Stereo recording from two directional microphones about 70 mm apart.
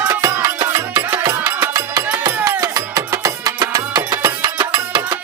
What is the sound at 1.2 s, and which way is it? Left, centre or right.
Music, right.